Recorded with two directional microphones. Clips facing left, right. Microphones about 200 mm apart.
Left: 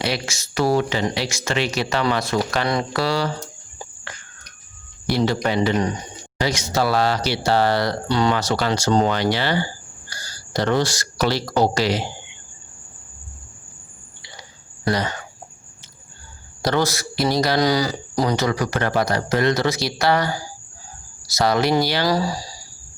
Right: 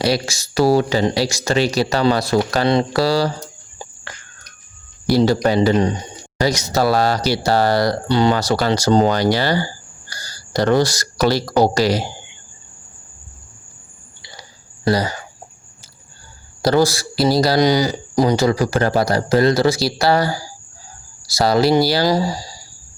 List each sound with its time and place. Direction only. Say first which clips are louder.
0.0 s speech: right 6 dB; 35° right (ahead or behind)
5.0 s speech: right 5 dB; 40° right (ahead or behind)
6.4 s speech: right 4 dB; 40° right (ahead or behind)
14.2 s a sound: right 2 dB; 35° right (ahead or behind)
14.8 s speech: right 4 dB; 30° right (ahead or behind)
16.6 s speech: right 5 dB; 35° right (ahead or behind)
17.6 s speech: right 4 dB; 20° right (ahead or behind)
22.0 s speech: right 3 dB; 20° right (ahead or behind)